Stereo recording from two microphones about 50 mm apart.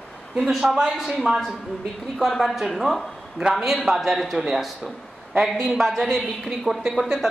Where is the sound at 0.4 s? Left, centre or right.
Centre.